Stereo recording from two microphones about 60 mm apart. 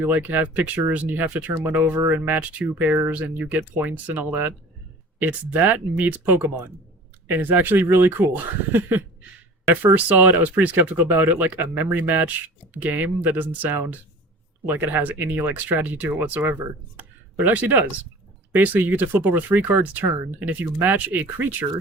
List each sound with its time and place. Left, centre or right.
0.0 s speech: right
17.0 s a sound: right
18.5 s speech: right